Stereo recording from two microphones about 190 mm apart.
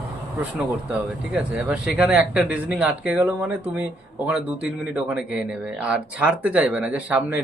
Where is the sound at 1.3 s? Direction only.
5° right (ahead or behind).